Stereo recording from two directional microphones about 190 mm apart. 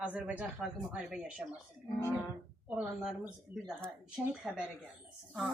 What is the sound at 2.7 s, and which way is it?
Speech, 5° right (ahead or behind).